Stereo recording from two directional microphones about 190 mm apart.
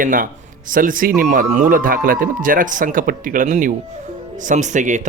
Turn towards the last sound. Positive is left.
turn(degrees=-40)  # may be behind; listen again after turning